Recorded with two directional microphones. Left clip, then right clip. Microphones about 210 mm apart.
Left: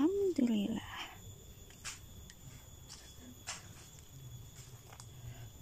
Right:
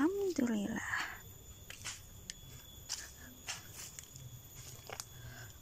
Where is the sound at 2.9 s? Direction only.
45° right (ahead or behind).